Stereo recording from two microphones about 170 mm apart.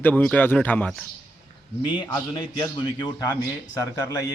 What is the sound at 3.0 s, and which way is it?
A man's voice, 20° left (ahead or behind).